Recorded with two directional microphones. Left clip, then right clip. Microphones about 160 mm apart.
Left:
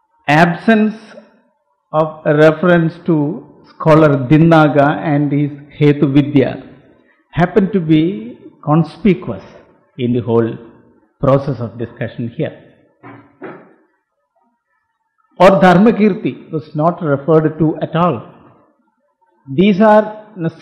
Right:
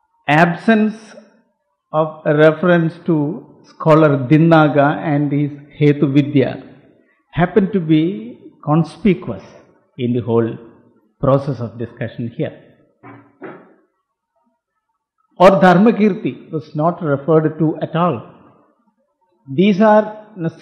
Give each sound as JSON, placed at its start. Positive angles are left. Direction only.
{"t": 0.2, "sound": "a man's voice", "side_deg": 35}
{"t": 7.2, "sound": "a sound", "side_deg": 35}
{"t": 15.4, "sound": "a man's voice", "side_deg": 35}
{"t": 19.5, "sound": "a man's voice", "side_deg": 35}